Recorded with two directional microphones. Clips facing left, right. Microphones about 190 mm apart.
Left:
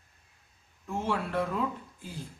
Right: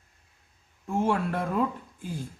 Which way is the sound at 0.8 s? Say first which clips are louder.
Right 6 dB; 50° right (ahead or behind).